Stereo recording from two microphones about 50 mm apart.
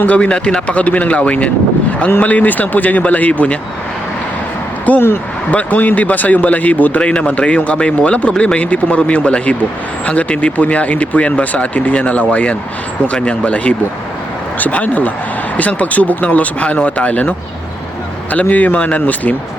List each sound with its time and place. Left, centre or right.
0.0 s speech: left
4.9 s speech: left
7.0 s speech: left